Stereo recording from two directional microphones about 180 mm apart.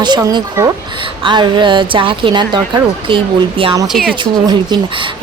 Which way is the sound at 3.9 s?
Centre (ahead or behind).